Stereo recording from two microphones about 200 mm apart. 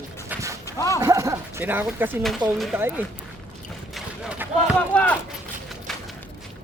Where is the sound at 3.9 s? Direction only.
5° right (ahead or behind).